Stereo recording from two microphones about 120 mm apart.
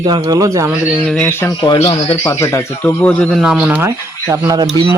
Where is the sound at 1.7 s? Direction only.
60° left (ahead or behind).